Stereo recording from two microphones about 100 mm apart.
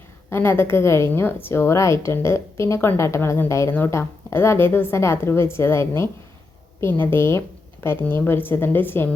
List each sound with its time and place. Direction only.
0.3 s a woman's voice: 25° left (ahead or behind)